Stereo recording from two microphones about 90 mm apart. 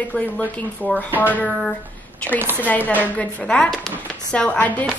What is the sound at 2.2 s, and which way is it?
Speech, 10° left (ahead or behind).